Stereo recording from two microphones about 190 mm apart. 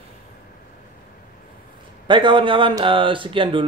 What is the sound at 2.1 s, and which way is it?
Speech, 25° right (ahead or behind).